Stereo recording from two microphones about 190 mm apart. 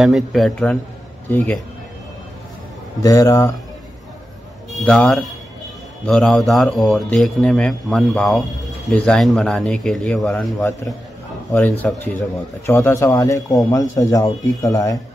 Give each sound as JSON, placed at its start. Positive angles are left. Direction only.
{"t": 0.0, "sound": "speech", "side_deg": 0}
{"t": 3.0, "sound": "speech", "side_deg": 20}
{"t": 4.7, "sound": "speech", "side_deg": 5}
{"t": 11.5, "sound": "speech", "side_deg": 10}